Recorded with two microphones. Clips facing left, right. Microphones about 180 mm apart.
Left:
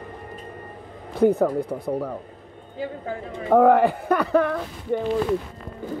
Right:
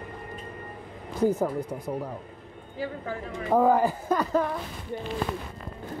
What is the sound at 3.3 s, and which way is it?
Speech, 65° left (ahead or behind).